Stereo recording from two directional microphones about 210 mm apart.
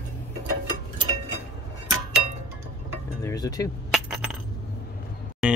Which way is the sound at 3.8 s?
Centre (ahead or behind).